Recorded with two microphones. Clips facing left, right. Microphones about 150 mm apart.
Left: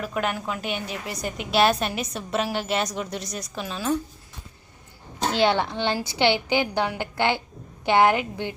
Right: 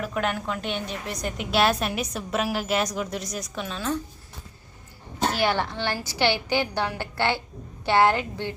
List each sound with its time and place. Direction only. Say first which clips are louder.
0.0 s a woman's voice: even; 5° left (ahead or behind)
5.3 s a woman's voice: left 5 dB; 20° left (ahead or behind)